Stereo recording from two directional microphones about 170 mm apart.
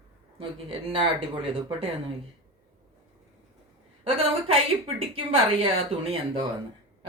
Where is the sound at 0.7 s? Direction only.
30° right (ahead or behind).